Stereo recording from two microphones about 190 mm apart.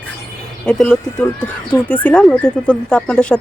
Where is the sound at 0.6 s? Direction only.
5° left (ahead or behind).